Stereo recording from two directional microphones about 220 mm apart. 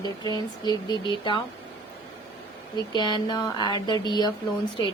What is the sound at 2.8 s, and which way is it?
Speech, 20° left (ahead or behind).